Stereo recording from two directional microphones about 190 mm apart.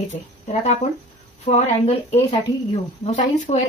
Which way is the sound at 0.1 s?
40° left (ahead or behind).